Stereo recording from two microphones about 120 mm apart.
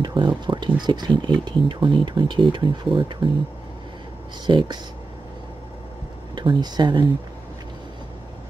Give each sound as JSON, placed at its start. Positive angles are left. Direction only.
{"t": 0.0, "sound": "speech", "side_deg": -40}
{"t": 4.5, "sound": "speech", "side_deg": -40}
{"t": 6.3, "sound": "speech", "side_deg": -40}